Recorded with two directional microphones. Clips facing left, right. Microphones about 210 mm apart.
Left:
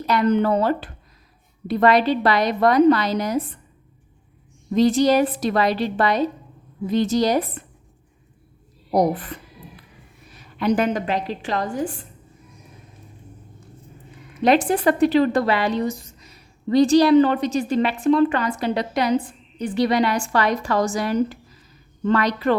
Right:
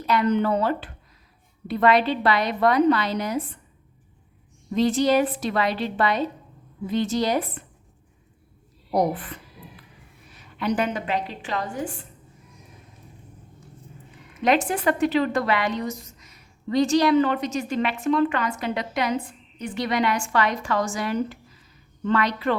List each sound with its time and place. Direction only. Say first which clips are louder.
0.0 s a woman's voice: left 3 dB; 40° left (ahead or behind)
4.7 s a woman's voice: left 3 dB; 40° left (ahead or behind)
8.9 s a woman's voice: left 3 dB; 40° left (ahead or behind)
14.4 s a woman's voice: left 4 dB; 35° left (ahead or behind)